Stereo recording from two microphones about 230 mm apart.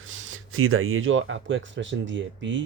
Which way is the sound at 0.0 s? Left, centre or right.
Right.